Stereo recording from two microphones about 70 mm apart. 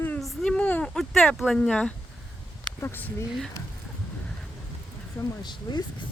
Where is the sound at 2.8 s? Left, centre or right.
Left.